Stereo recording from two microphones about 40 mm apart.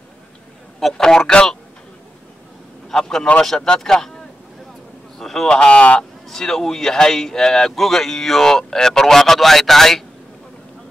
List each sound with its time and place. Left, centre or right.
0.7 s a man's voice: centre
1.0 s speech: centre
2.9 s a man's voice: centre
5.2 s a sound: centre
5.5 s speech: left
6.2 s speech: centre